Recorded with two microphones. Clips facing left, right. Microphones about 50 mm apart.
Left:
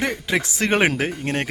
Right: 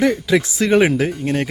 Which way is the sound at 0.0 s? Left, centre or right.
Left.